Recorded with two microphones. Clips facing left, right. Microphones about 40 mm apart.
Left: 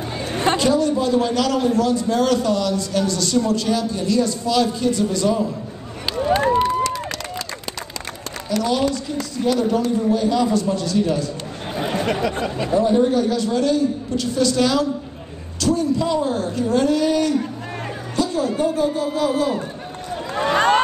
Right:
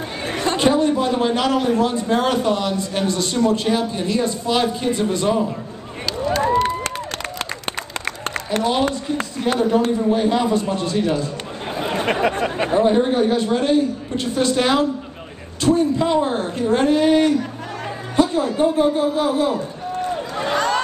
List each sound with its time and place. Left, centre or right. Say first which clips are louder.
0.6 s a man's voice: right 4 dB; right
8.5 s a man's voice: even; right
20.3 s a sound: left 5 dB; left